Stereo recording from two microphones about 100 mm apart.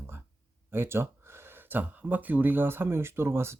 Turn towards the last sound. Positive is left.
turn(degrees=-25)  # may be behind; listen again after turning